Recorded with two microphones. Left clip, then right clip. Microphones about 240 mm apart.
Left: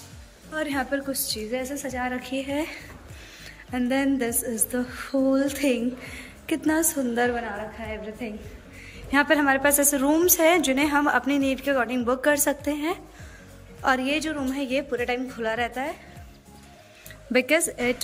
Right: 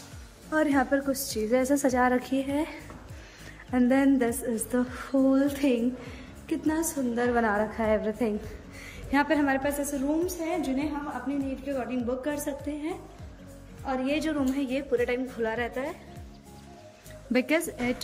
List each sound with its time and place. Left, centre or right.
0.5 s speech: centre
7.3 s speech: centre
9.1 s a woman's voice: centre
17.3 s speech: centre